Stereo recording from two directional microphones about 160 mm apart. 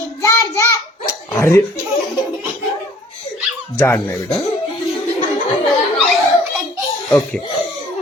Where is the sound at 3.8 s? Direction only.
15° left (ahead or behind).